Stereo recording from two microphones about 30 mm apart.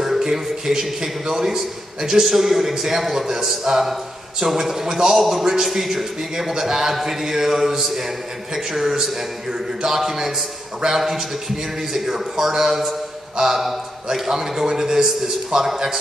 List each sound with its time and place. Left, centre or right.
0.0 s a man's voice: centre
3.7 s a sound: centre
4.5 s a man's voice: centre
13.4 s a man's voice: right